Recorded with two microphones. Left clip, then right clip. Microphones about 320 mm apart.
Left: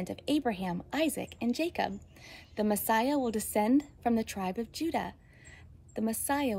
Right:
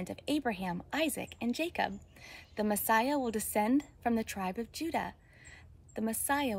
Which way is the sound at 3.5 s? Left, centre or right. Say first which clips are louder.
Left 3 dB; centre.